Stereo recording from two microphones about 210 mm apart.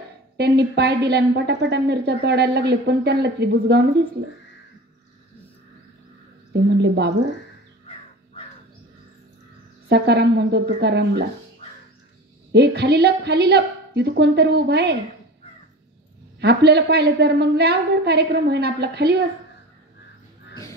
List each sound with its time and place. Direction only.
0.4 s a woman's voice: 50° right (ahead or behind)
6.5 s a woman's voice: 55° right (ahead or behind)
9.8 s a woman's voice: 55° right (ahead or behind)
12.5 s a woman's voice: 50° right (ahead or behind)
16.3 s a woman's voice: 50° right (ahead or behind)